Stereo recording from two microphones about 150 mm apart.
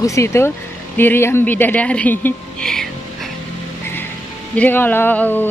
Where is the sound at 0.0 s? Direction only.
20° left (ahead or behind); by 2.9 s 5° left (ahead or behind).